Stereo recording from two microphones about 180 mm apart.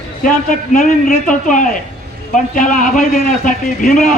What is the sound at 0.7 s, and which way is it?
A man's voice, 45° left (ahead or behind).